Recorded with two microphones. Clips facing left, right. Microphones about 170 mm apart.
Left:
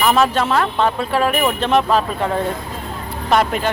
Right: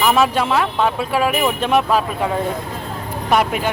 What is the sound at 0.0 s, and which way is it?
Speech, 5° right (ahead or behind).